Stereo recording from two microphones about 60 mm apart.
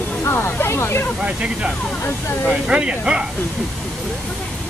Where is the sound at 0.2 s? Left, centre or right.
Left.